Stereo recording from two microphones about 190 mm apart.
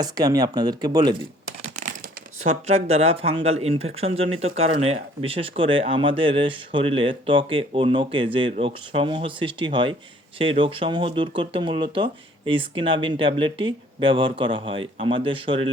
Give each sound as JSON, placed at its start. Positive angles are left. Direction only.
{"t": 0.0, "sound": "speech", "side_deg": -20}
{"t": 2.4, "sound": "speech", "side_deg": -35}